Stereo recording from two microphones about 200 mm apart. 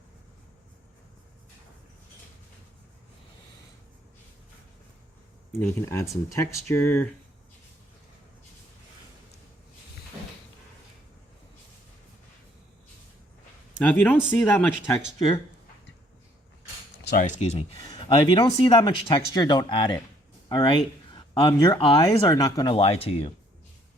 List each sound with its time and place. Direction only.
5.5 s speech: 10° left (ahead or behind)
13.7 s speech: 10° left (ahead or behind)
17.2 s speech: 40° left (ahead or behind)
17.7 s speech: 20° left (ahead or behind)